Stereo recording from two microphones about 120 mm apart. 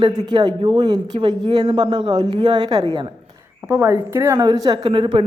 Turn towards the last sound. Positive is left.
turn(degrees=-45)  # may be behind; listen again after turning